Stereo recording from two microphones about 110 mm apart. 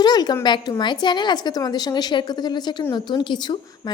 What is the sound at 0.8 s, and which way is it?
A woman's voice, 45° left (ahead or behind).